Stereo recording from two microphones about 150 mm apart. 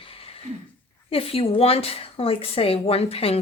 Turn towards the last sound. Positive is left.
turn(degrees=40)  # may be behind; listen again after turning